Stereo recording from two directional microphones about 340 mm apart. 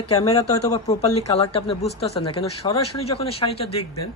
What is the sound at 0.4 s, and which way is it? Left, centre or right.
Speech, centre.